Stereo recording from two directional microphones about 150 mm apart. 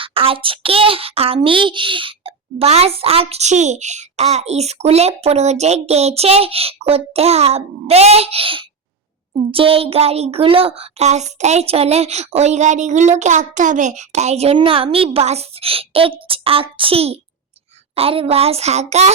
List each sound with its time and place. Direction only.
0.0 s a child's voice: 40° right (ahead or behind)